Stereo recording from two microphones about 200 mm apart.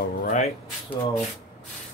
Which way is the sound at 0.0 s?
40° left (ahead or behind).